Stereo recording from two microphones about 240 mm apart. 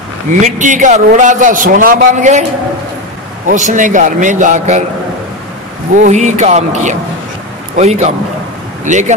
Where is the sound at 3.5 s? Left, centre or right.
Right.